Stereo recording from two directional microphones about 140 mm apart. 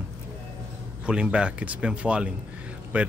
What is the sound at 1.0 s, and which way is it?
Speech, 5° right (ahead or behind).